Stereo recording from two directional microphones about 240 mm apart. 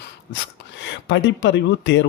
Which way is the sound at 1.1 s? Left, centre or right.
Left.